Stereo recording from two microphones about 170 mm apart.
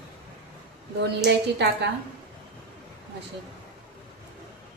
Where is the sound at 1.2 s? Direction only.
80° right.